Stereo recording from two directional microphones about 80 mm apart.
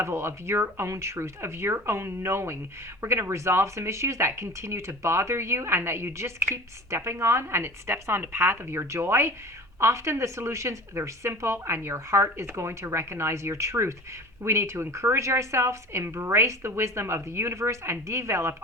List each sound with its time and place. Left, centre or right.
0.0 s a woman's voice: right